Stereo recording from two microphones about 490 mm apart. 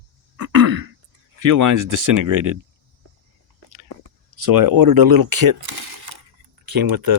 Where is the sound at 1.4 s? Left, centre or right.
Right.